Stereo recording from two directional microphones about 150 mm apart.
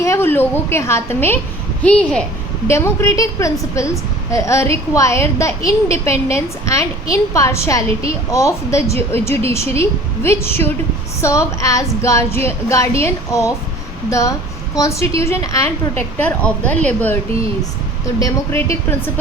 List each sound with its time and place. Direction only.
0.0 s a woman's voice: 15° left (ahead or behind)
2.6 s a woman's voice: 20° left (ahead or behind)
18.2 s a woman's voice: 15° left (ahead or behind)